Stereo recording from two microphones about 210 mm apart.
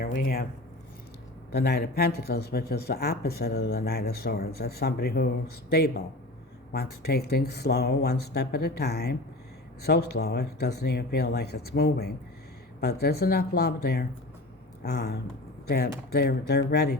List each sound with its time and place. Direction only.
0.0 s speech: 45° left (ahead or behind)
1.5 s speech: 50° left (ahead or behind)